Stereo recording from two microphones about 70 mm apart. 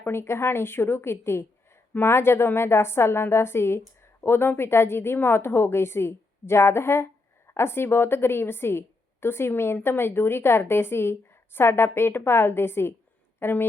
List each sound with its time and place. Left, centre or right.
0.0 s a woman's voice: left